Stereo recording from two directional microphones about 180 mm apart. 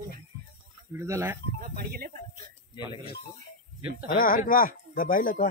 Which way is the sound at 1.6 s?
50° right (ahead or behind).